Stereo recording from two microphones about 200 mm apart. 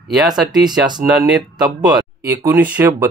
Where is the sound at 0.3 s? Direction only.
20° right (ahead or behind).